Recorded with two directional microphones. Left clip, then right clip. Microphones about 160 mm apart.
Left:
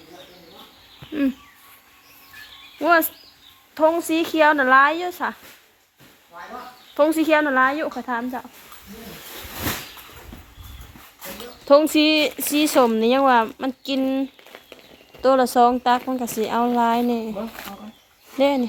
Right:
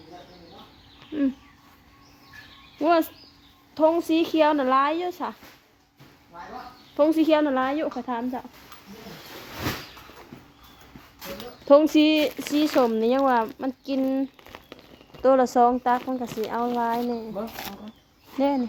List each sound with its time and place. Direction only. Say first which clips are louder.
1.1 s speech: left 3 dB; 5° left (ahead or behind)
2.8 s a sound: left 4 dB; 15° right (ahead or behind)
3.8 s speech: left 2 dB; 15° right (ahead or behind)
6.9 s speech: left 2 dB; 10° right (ahead or behind)
11.7 s speech: left 2 dB; 15° right (ahead or behind)
15.7 s speech: left 4 dB; centre (ahead or behind)
16.4 s a woman's voice: left 6 dB; 15° left (ahead or behind)
18.3 s speech: left 5 dB; centre (ahead or behind)